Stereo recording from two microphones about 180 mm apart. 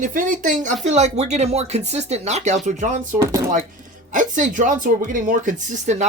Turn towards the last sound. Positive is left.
turn(degrees=-40)  # may be behind; listen again after turning